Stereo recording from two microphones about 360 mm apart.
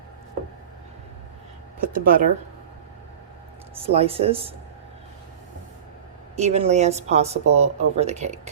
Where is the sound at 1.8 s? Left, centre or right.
Right.